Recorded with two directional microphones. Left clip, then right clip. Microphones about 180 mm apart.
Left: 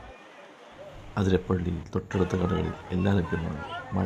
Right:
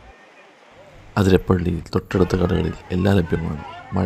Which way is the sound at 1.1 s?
30° right (ahead or behind).